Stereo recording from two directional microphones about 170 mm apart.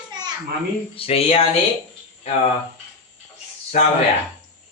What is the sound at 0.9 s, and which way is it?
Speech, 35° left (ahead or behind).